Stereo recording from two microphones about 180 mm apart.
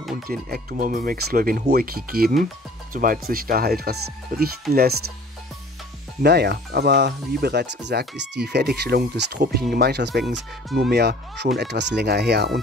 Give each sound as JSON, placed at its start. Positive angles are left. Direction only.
{"t": 0.3, "sound": "speech", "side_deg": -55}
{"t": 6.2, "sound": "speech", "side_deg": -65}
{"t": 10.2, "sound": "speech", "side_deg": 0}
{"t": 10.9, "sound": "speech", "side_deg": -65}